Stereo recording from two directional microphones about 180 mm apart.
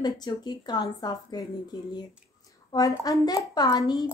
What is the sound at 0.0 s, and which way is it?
A woman's voice, 25° left (ahead or behind).